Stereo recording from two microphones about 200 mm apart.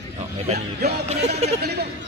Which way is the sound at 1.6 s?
55° right (ahead or behind).